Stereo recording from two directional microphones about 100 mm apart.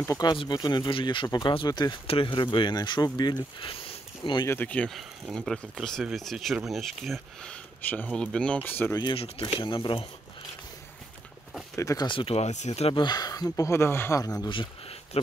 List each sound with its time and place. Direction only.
0.1 s speech: 45° left (ahead or behind)
2.0 s speech: 60° left (ahead or behind)
4.5 s speech: 15° left (ahead or behind)
5.3 s speech: centre (ahead or behind)
9.1 s speech: 70° left (ahead or behind)
11.7 s speech: 30° left (ahead or behind)
12.1 s speech: 65° left (ahead or behind); by 12.9 s 90° left
12.9 s speech: 45° left (ahead or behind)
13.7 s a man's voice: 25° left (ahead or behind)
14.5 s speech: 60° left (ahead or behind)